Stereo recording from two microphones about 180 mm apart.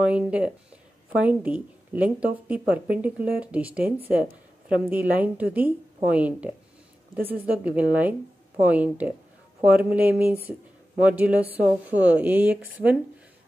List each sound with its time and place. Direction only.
0.0 s speech: 5° right (ahead or behind)